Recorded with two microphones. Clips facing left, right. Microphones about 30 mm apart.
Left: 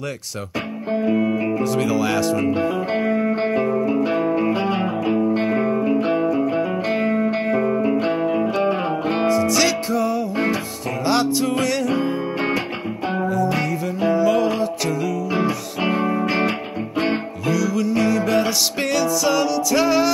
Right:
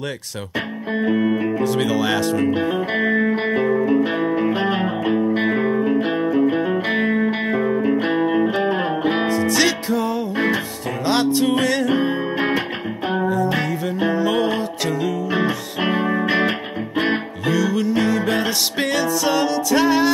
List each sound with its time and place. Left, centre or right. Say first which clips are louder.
0.9 s speech: right 1 dB; centre
2.6 s music: right 1 dB; centre
3.3 s music: even; centre
3.6 s music: right 2 dB; centre
6.2 s music: right 2 dB; centre
7.7 s music: even; centre
8.1 s music: right 2 dB; centre
11.2 s music: right 2 dB; right
12.0 s music: right 2 dB; centre
13.2 s music: even; right
15.8 s music: even; centre
17.5 s music: right 1 dB; right